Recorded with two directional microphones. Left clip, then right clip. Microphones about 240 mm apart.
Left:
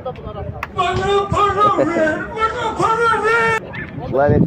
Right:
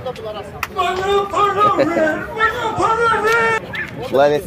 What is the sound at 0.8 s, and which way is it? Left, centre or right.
Speech, centre.